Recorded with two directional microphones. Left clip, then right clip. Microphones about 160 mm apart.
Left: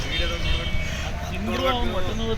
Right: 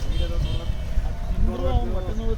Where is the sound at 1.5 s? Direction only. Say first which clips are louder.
Left 6 dB; 15° right (ahead or behind).